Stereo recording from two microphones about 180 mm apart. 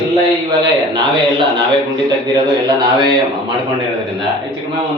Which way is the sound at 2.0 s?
20° right (ahead or behind).